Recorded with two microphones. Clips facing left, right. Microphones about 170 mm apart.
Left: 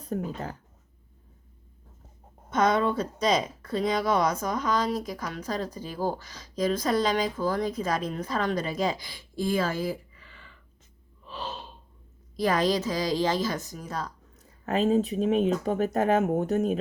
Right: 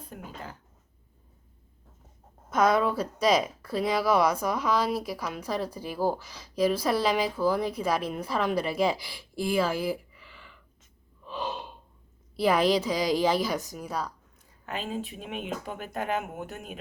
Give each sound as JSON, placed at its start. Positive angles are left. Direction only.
{"t": 0.0, "sound": "speech", "side_deg": 40}
{"t": 2.5, "sound": "a woman's voice", "side_deg": -5}
{"t": 11.3, "sound": "gasp", "side_deg": -15}
{"t": 12.4, "sound": "a woman's voice", "side_deg": -10}
{"t": 14.6, "sound": "speech", "side_deg": 40}